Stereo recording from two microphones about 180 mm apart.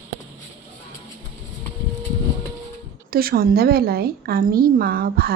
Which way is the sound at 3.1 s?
55° right (ahead or behind).